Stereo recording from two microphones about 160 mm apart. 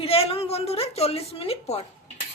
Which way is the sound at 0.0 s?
40° left (ahead or behind).